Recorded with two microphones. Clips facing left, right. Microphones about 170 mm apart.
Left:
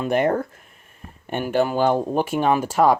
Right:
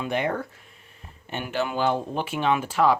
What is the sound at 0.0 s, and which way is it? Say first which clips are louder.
Speech: left 6 dB; 45° left (ahead or behind).